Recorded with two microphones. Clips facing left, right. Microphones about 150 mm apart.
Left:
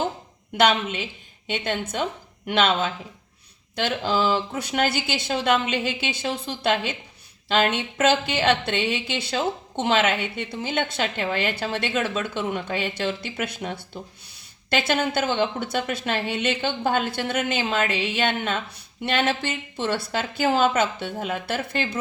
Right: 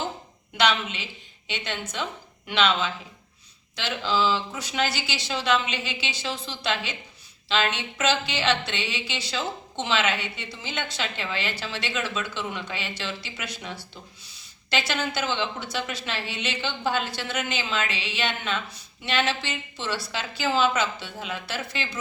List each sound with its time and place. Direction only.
0.5 s speech: 50° left (ahead or behind)